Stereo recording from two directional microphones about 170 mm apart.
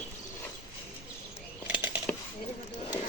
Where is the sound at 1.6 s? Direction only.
10° right (ahead or behind).